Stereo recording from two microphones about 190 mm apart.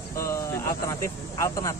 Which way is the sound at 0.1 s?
15° left (ahead or behind).